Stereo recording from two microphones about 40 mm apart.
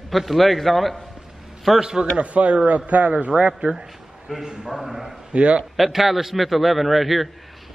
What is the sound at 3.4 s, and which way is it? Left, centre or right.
A man's voice, right.